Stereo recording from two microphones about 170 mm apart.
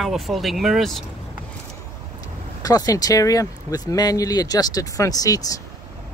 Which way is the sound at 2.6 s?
20° left (ahead or behind).